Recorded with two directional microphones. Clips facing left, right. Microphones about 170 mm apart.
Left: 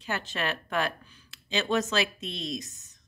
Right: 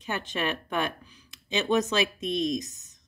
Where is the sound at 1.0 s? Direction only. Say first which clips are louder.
Right 2 dB; 10° right (ahead or behind).